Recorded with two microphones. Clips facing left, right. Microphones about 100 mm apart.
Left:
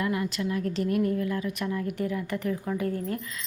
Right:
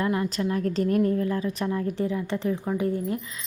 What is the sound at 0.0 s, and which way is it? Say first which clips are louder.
A woman's voice: right 3 dB; 30° right (ahead or behind).